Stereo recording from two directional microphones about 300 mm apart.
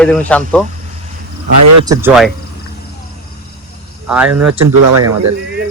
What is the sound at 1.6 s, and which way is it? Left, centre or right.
Speech, right.